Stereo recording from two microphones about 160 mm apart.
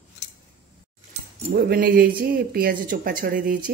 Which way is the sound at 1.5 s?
70° right (ahead or behind).